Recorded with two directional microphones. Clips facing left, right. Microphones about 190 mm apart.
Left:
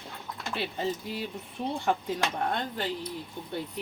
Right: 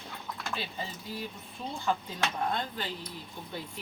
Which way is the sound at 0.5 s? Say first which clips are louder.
Left 6 dB; 65° left (ahead or behind).